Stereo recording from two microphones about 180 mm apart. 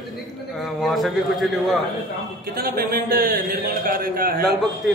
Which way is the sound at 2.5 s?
55° right (ahead or behind).